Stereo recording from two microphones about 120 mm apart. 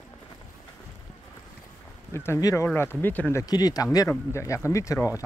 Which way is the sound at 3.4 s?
35° left (ahead or behind).